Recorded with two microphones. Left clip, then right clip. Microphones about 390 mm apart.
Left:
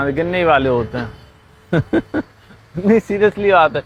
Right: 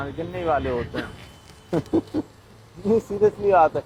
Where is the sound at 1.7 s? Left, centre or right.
Left.